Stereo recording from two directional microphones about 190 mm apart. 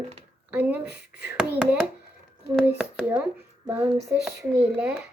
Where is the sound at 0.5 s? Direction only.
10° right (ahead or behind).